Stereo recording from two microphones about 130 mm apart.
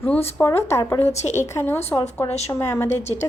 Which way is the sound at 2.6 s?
20° left (ahead or behind).